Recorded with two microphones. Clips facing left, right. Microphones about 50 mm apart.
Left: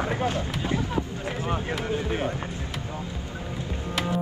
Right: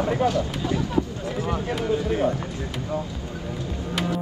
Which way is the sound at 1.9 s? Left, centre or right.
Left.